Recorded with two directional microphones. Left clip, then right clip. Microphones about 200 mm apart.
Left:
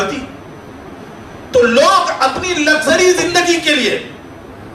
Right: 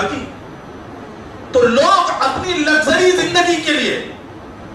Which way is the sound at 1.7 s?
35° left (ahead or behind).